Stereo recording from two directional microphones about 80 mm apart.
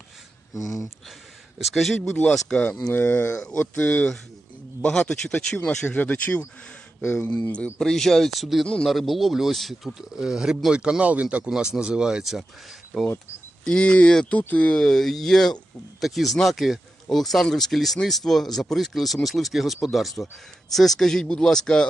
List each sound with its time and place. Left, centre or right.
0.5 s speech: left
1.5 s speech: centre
2.0 s speech: centre
2.9 s speech: left
4.8 s speech: centre
6.0 s speech: left
7.5 s speech: centre
8.6 s speech: centre
8.9 s speech: centre
13.7 s speech: centre
14.8 s speech: centre